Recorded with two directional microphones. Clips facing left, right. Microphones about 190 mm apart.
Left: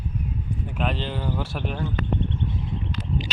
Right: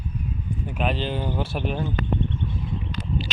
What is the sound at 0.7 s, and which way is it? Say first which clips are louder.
Speech: right 2 dB; 10° right (ahead or behind).